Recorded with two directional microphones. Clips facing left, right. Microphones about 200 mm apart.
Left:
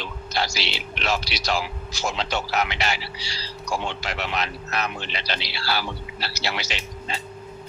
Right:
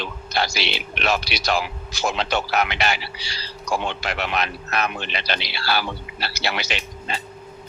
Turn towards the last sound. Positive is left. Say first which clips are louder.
# right 2 dB
turn(degrees=-60)  # may be behind; listen again after turning